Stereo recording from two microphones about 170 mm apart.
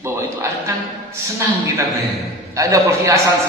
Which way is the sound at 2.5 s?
20° right (ahead or behind).